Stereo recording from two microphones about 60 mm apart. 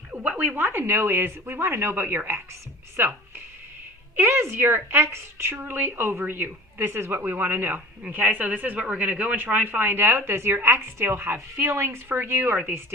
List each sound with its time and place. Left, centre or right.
0.1 s a woman's voice: right
4.2 s a woman's voice: right